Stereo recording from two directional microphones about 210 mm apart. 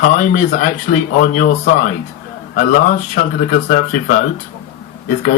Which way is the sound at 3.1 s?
40° left (ahead or behind).